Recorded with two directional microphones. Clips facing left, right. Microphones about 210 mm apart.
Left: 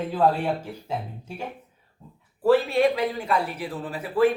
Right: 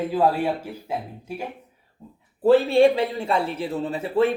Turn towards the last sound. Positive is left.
turn(degrees=-25)  # may be behind; listen again after turning